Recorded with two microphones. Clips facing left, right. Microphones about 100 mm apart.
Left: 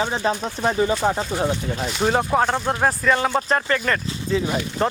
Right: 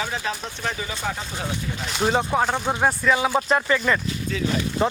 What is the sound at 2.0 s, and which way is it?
A man's voice, centre (ahead or behind).